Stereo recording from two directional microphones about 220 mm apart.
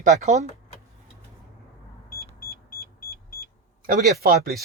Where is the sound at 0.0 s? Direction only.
35° right (ahead or behind).